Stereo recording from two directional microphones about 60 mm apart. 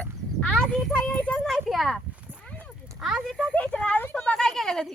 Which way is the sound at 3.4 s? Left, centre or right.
Centre.